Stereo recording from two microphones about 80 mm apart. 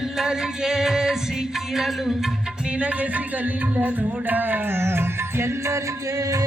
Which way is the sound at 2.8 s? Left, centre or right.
Centre.